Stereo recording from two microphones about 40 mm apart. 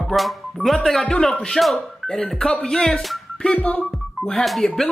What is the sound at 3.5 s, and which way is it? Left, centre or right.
Speech, left.